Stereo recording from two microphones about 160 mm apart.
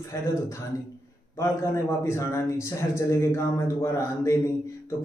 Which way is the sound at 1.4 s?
20° left (ahead or behind).